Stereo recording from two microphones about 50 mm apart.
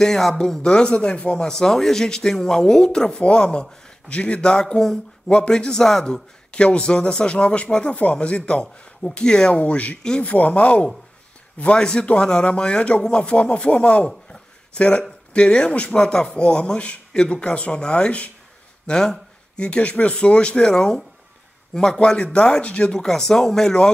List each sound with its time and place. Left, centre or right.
0.0 s speech: centre
6.5 s speech: left
9.6 s a man's voice: left
22.9 s speech: centre